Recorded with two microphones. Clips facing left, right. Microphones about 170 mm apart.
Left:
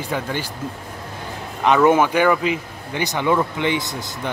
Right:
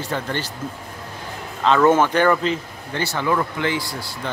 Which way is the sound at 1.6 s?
15° left (ahead or behind).